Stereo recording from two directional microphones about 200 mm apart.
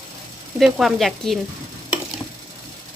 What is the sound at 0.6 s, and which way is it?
Speech, centre (ahead or behind).